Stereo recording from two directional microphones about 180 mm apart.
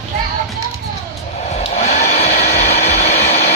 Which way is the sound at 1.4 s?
40° left (ahead or behind).